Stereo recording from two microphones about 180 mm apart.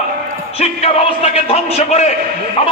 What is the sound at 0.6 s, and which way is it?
A man's voice, 35° left (ahead or behind).